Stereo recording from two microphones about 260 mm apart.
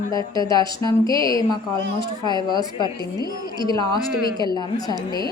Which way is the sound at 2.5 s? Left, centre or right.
Centre.